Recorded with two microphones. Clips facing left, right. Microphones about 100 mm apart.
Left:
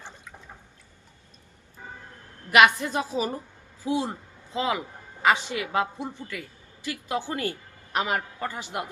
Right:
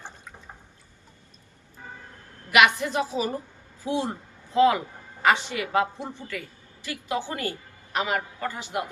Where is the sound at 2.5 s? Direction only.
35° left (ahead or behind).